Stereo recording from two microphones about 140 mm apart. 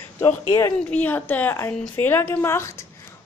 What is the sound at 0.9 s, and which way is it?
A woman's voice, 10° left (ahead or behind).